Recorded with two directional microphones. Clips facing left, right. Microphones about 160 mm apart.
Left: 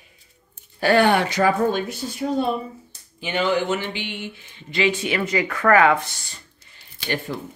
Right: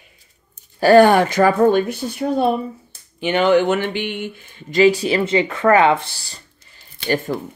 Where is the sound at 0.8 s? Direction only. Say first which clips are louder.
Right 7 dB; 40° right (ahead or behind).